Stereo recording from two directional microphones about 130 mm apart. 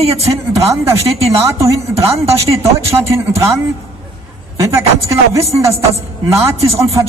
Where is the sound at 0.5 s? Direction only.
25° right (ahead or behind).